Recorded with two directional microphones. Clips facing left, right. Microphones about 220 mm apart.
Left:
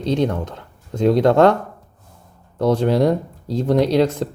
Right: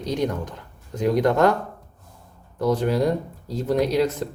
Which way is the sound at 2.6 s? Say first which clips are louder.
Left 4 dB; 30° left (ahead or behind).